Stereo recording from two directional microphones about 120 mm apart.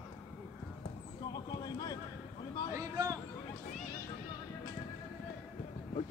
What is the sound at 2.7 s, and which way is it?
Speech, 25° right (ahead or behind).